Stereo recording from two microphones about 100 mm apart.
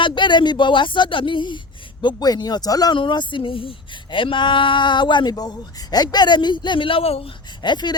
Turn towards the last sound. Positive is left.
turn(degrees=45)  # may be behind; listen again after turning